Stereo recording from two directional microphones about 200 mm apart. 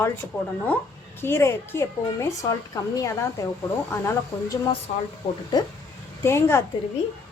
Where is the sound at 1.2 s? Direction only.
15° left (ahead or behind).